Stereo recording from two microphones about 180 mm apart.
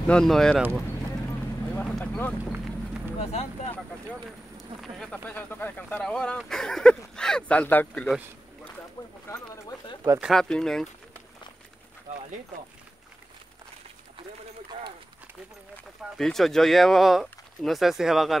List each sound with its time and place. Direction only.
0.0 s speech: 5° left (ahead or behind)
0.6 s speech: 10° right (ahead or behind)
1.8 s vehicle: 5° left (ahead or behind)
2.5 s clip-clop: 5° right (ahead or behind)
3.2 s speech: 35° left (ahead or behind)
3.7 s speech: 5° left (ahead or behind)
9.3 s speech: 20° left (ahead or behind)
10.2 s speech: 5° left (ahead or behind)
12.1 s speech: 45° right (ahead or behind)
16.2 s speech: centre (ahead or behind)